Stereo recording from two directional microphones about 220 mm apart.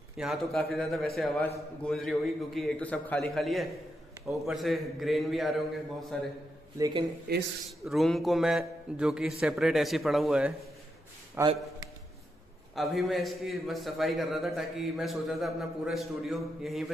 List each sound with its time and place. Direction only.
0.2 s a man's voice: centre (ahead or behind)
6.8 s speech: 20° right (ahead or behind)
7.3 s a man's voice: 45° right (ahead or behind)
7.8 s a man's voice: centre (ahead or behind)
12.7 s a man's voice: centre (ahead or behind)